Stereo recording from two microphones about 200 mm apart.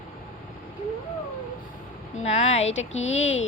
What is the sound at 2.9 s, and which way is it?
Speech, 70° left (ahead or behind).